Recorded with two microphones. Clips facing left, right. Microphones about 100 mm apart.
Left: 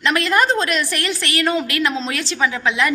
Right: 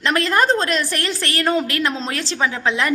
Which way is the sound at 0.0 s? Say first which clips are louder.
Even; 35° right (ahead or behind).